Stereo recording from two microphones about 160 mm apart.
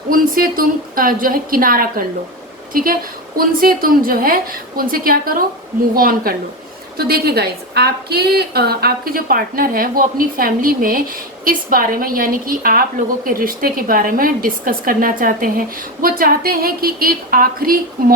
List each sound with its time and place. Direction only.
0.1 s a woman's voice: 60° right (ahead or behind)